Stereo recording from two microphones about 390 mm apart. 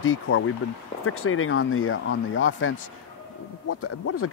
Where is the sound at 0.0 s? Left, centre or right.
Left.